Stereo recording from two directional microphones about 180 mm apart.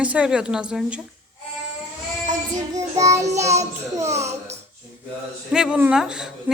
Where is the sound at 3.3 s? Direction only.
15° right (ahead or behind).